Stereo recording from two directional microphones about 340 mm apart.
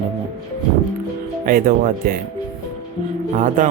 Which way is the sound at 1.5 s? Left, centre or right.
Right.